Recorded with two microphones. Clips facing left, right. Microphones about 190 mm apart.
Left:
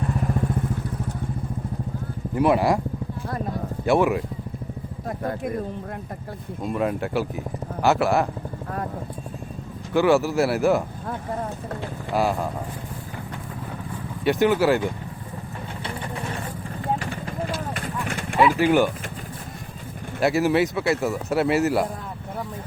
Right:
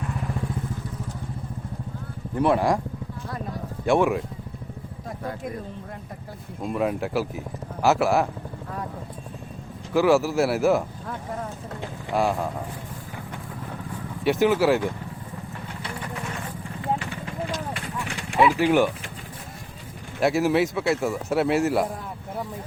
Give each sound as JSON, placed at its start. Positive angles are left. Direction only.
{"t": 0.0, "sound": "vehicle", "side_deg": 40}
{"t": 2.3, "sound": "speech", "side_deg": 5}
{"t": 3.8, "sound": "speech", "side_deg": 0}
{"t": 5.0, "sound": "speech", "side_deg": 50}
{"t": 6.6, "sound": "speech", "side_deg": -5}
{"t": 9.9, "sound": "speech", "side_deg": 0}
{"t": 12.1, "sound": "speech", "side_deg": 0}
{"t": 14.3, "sound": "speech", "side_deg": 0}
{"t": 15.8, "sound": "vehicle", "side_deg": 30}
{"t": 17.7, "sound": "clip-clop", "side_deg": 45}
{"t": 18.3, "sound": "speech", "side_deg": 0}
{"t": 20.1, "sound": "speech", "side_deg": 0}